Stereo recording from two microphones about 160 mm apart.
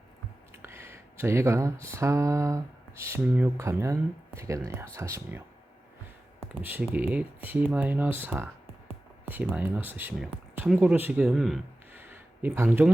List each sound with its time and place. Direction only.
0.5 s speech: 15° right (ahead or behind)
6.5 s speech: 10° right (ahead or behind)
11.9 s a sound: 10° right (ahead or behind)